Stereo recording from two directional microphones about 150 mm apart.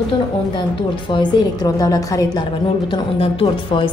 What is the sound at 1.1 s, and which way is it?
A woman's voice, 25° left (ahead or behind).